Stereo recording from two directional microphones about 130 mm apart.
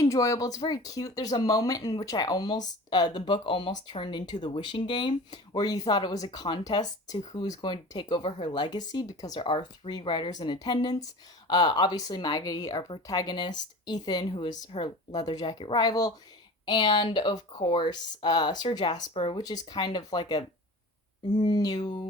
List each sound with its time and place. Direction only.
0.0 s speech: 25° left (ahead or behind)
19.1 s speech: 45° left (ahead or behind)
19.6 s speech: 35° left (ahead or behind)